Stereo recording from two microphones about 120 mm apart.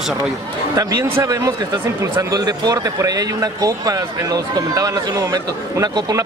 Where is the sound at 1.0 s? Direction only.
25° right (ahead or behind).